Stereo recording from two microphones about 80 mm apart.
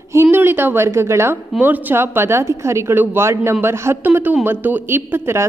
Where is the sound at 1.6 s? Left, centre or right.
Right.